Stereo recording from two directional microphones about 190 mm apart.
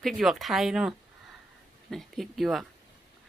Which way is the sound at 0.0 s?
Centre (ahead or behind).